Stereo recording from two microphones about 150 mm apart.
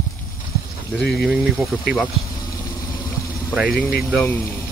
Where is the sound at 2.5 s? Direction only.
20° left (ahead or behind).